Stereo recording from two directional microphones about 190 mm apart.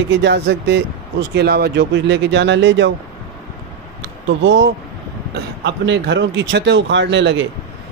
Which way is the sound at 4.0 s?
70° right (ahead or behind).